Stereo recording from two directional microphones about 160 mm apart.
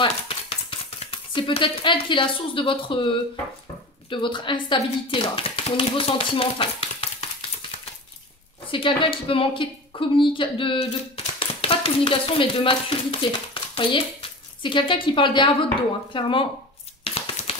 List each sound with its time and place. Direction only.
0.0 s speech: 35° left (ahead or behind)
4.1 s speech: 30° left (ahead or behind)
8.7 s speech: 30° left (ahead or behind)
13.6 s hands: 35° left (ahead or behind)
14.6 s speech: 30° left (ahead or behind)
17.0 s a sound: 40° left (ahead or behind)